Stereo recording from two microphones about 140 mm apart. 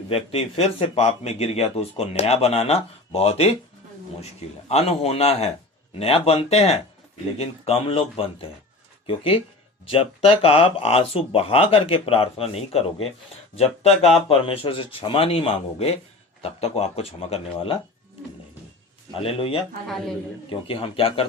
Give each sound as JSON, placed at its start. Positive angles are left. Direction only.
{"t": 0.1, "sound": "speech", "side_deg": 45}
{"t": 4.7, "sound": "speech", "side_deg": 50}
{"t": 19.2, "sound": "speech", "side_deg": 40}